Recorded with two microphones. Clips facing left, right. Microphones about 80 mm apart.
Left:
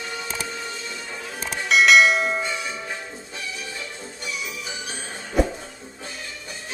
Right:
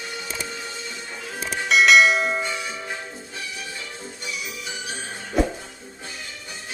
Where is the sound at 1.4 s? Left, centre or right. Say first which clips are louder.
Even; centre.